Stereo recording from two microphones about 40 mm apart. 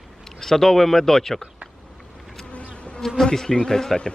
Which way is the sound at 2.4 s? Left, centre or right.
Left.